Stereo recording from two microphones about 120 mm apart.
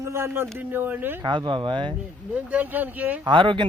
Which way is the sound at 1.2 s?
40° right (ahead or behind).